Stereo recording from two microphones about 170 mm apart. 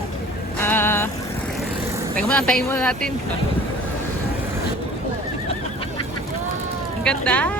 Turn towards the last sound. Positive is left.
turn(degrees=10)  # may be behind; listen again after turning